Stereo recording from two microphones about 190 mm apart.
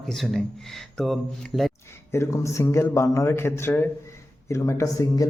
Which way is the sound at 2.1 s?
15° left (ahead or behind).